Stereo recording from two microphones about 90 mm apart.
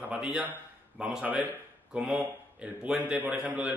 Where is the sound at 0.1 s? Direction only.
10° right (ahead or behind).